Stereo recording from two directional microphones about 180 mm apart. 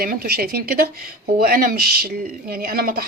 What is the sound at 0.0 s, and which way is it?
Speech, 55° right (ahead or behind).